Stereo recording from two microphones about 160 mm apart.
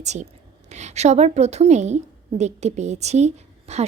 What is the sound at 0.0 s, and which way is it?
A woman's voice, 45° right (ahead or behind).